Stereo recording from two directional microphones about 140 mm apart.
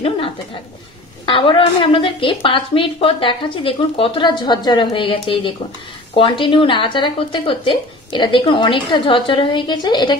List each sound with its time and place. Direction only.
1.2 s a woman's voice: 35° left (ahead or behind)